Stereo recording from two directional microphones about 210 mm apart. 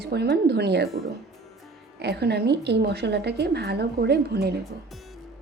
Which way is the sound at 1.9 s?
50° right (ahead or behind).